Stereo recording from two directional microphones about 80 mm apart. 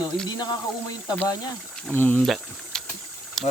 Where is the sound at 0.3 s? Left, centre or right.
Left.